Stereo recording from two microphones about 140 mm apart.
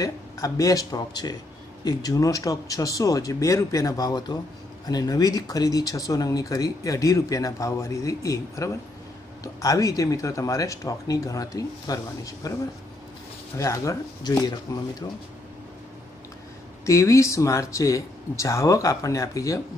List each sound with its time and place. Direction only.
0.0 s speech: 25° left (ahead or behind)
13.6 s speech: 20° left (ahead or behind)
16.8 s speech: 20° left (ahead or behind)